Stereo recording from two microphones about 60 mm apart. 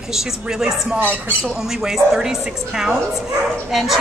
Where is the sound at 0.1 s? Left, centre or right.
Centre.